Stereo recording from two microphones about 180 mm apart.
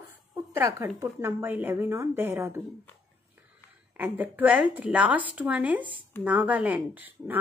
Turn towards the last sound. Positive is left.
turn(degrees=-10)  # may be behind; listen again after turning